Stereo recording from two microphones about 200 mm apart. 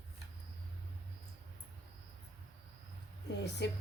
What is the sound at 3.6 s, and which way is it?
Speech, 60° left (ahead or behind).